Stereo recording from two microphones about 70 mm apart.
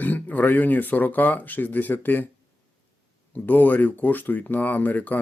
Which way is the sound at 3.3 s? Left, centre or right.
Left.